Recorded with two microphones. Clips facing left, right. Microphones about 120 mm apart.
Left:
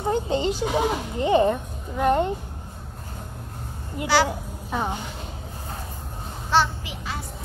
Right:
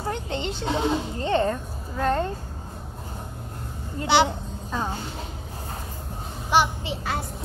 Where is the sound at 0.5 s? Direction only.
25° right (ahead or behind).